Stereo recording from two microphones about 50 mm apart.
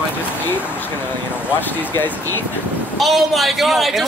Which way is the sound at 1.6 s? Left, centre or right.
Left.